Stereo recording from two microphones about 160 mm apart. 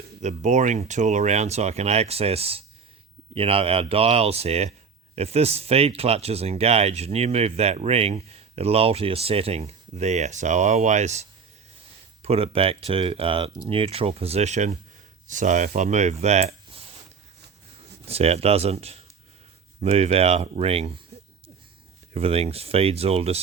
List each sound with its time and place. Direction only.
0.2 s speech: 45° right (ahead or behind)
16.2 s a sound: 45° right (ahead or behind)
18.0 s speech: 40° right (ahead or behind)
22.1 s speech: 40° right (ahead or behind)